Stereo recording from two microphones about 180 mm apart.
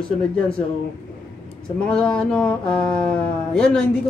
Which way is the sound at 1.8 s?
5° left (ahead or behind).